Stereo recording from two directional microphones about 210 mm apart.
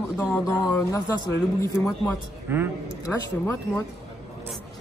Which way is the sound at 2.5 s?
10° right (ahead or behind).